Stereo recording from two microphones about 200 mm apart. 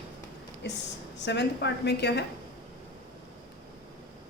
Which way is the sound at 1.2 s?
60° left (ahead or behind).